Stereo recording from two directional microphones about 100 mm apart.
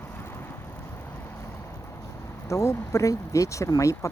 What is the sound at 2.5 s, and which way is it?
Speech, 30° left (ahead or behind).